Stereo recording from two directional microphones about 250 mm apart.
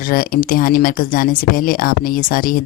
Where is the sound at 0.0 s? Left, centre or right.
Left.